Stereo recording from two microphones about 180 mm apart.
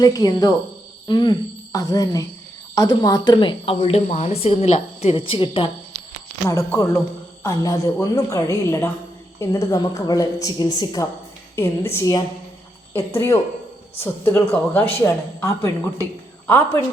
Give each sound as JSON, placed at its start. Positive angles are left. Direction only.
{"t": 0.0, "sound": "speech", "side_deg": 20}
{"t": 6.5, "sound": "a woman's voice", "side_deg": 15}